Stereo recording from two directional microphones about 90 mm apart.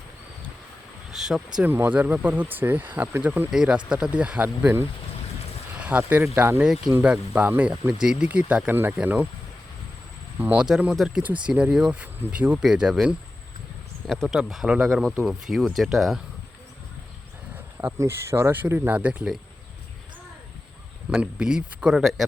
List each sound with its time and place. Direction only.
1.1 s a sound: 5° right (ahead or behind)
1.6 s speech: 20° right (ahead or behind)
3.5 s speech: 10° right (ahead or behind)
5.7 s a sound: 15° right (ahead or behind)
6.0 s speech: 25° right (ahead or behind)
6.6 s speech: 5° right (ahead or behind)
10.4 s speech: 10° right (ahead or behind)
11.4 s speech: 15° right (ahead or behind)
17.7 s speech: 30° right (ahead or behind)
21.2 s speech: 10° right (ahead or behind)